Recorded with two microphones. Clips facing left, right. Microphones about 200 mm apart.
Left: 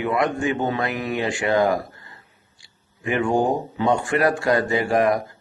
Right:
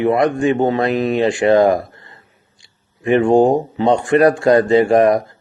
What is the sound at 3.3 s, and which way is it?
Speech, 75° right (ahead or behind).